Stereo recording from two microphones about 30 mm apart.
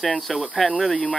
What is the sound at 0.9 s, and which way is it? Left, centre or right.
Speech, left.